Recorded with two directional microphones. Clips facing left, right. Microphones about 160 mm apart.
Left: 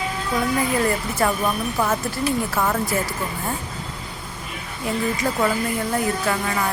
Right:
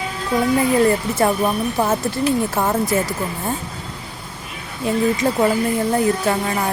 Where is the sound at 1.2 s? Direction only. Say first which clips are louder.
Right 3 dB; 30° right (ahead or behind).